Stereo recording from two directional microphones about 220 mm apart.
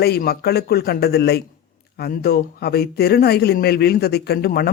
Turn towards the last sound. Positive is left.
turn(degrees=45)  # may be behind; listen again after turning